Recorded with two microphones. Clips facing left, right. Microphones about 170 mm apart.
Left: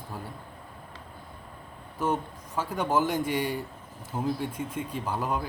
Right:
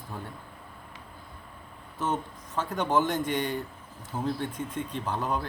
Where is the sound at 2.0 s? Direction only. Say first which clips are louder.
Left 2 dB; 10° left (ahead or behind).